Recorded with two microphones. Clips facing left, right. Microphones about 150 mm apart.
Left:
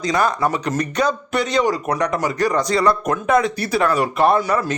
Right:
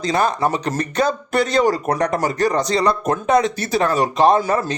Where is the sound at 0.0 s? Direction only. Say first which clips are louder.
Even; 25° right (ahead or behind).